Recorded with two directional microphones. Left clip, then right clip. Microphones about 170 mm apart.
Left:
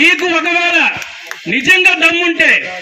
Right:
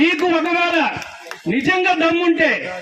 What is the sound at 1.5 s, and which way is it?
A man's voice, 40° right (ahead or behind).